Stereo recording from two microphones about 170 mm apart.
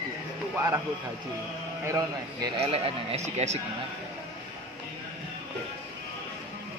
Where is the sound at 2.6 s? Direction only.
35° right (ahead or behind).